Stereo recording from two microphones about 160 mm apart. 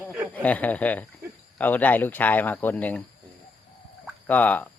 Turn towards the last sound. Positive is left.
turn(degrees=10)  # may be behind; listen again after turning